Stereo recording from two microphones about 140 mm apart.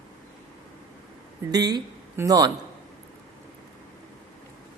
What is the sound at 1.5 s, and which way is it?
A woman's voice, 30° right (ahead or behind).